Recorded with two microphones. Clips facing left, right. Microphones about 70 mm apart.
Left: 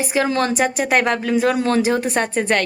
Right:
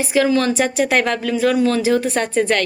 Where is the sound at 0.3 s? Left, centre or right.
Left.